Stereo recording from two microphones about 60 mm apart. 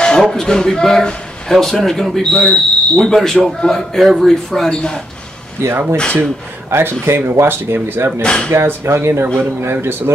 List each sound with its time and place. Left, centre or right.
0.3 s speech: centre
5.6 s speech: right
8.2 s speech: centre
8.5 s speech: right